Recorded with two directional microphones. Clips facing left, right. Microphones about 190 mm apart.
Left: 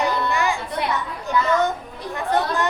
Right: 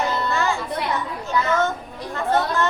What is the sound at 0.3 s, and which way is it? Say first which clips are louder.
Children playing: even; 15° left (ahead or behind).